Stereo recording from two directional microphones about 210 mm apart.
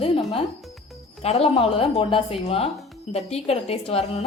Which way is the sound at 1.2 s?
30° left (ahead or behind).